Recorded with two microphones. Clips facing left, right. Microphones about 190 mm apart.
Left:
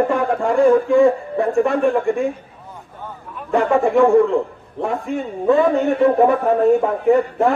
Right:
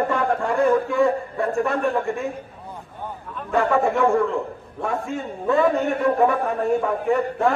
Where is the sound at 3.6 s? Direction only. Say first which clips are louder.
Left 4 dB; 20° left (ahead or behind).